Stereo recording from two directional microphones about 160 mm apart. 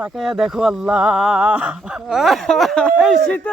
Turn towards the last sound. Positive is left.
turn(degrees=10)  # may be behind; listen again after turning